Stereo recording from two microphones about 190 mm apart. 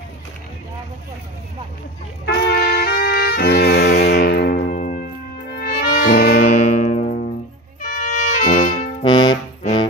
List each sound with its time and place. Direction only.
2.2 s brass instrument: 55° left (ahead or behind)
6.4 s music: 40° left (ahead or behind)
9.0 s music: 25° left (ahead or behind)